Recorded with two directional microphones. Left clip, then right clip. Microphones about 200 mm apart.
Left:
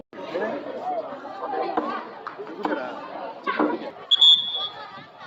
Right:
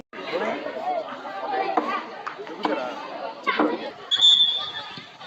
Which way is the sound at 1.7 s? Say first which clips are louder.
Right 2 dB; 40° right (ahead or behind).